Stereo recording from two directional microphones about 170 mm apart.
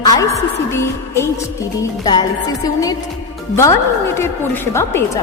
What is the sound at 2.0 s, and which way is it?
Music, 20° left (ahead or behind).